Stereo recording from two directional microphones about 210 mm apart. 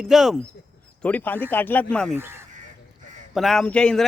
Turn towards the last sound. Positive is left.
turn(degrees=5)  # may be behind; listen again after turning